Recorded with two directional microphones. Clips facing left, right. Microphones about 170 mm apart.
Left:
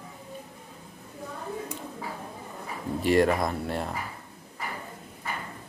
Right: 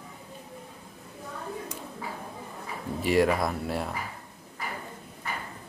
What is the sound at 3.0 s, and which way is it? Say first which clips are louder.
Speech: left 1 dB; centre (ahead or behind).